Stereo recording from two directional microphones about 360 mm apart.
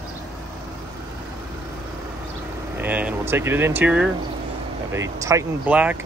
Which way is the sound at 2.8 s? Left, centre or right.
Centre.